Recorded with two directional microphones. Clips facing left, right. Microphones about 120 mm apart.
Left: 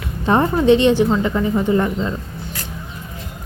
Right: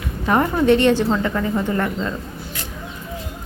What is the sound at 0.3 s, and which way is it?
A woman's voice, 25° left (ahead or behind).